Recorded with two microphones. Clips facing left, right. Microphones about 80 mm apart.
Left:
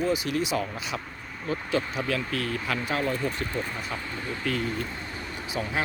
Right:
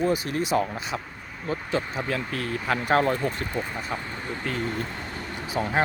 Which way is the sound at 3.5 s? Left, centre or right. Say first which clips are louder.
Right 1 dB; centre.